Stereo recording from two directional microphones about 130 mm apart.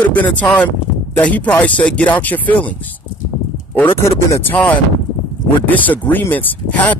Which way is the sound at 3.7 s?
20° left (ahead or behind).